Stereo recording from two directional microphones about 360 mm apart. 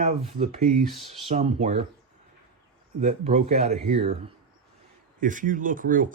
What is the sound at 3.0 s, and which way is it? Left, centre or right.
Speech, centre.